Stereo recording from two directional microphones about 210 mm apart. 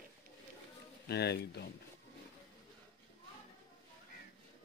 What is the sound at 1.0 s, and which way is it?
Speech, 50° left (ahead or behind).